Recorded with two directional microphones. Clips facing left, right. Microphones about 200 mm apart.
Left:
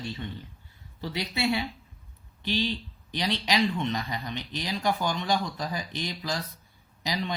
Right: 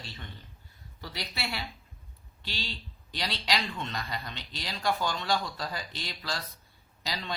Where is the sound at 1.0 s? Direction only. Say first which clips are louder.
Left 8 dB; 25° left (ahead or behind).